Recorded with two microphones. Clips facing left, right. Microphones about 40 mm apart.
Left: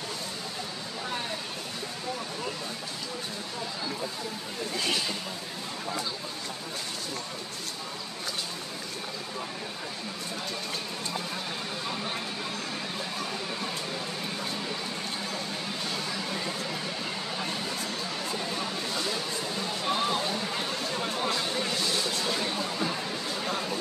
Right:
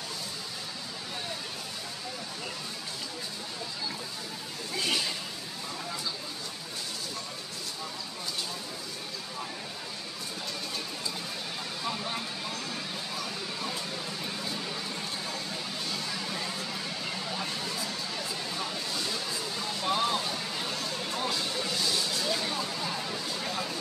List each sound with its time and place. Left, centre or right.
16.1 s a sound: centre
21.3 s music: left
22.2 s chatter: centre